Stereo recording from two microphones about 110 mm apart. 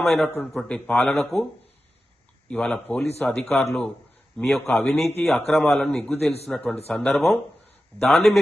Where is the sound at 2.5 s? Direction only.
10° left (ahead or behind).